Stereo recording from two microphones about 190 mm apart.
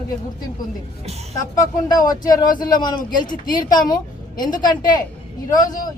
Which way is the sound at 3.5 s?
20° left (ahead or behind).